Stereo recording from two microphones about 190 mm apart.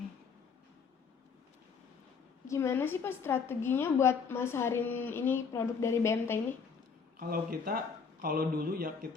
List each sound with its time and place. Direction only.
2.5 s a woman's voice: 15° left (ahead or behind)
7.2 s speech: 50° right (ahead or behind)